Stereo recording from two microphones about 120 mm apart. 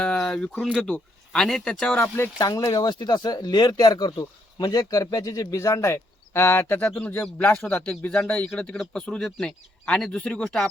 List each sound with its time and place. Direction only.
0.0 s a sound: 5° left (ahead or behind)
0.6 s speech: 5° left (ahead or behind)
2.0 s speech: 20° left (ahead or behind)
2.5 s speech: 35° left (ahead or behind); by 10.7 s 5° left (ahead or behind)